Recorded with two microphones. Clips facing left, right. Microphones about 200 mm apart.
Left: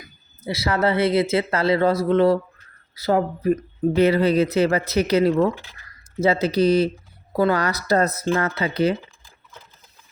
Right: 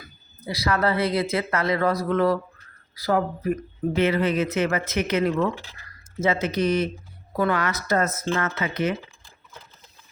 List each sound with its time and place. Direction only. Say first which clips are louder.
0.0 s speech: left 4 dB; 25° left (ahead or behind)